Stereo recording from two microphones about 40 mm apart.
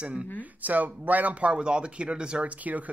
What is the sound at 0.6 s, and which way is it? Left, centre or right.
Speech, right.